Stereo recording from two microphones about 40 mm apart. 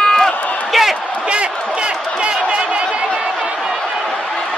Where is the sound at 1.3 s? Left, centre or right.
Right.